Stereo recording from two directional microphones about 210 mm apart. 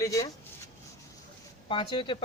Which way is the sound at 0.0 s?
15° left (ahead or behind).